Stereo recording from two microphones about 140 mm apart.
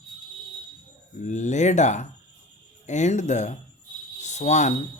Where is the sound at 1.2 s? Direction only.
60° left (ahead or behind).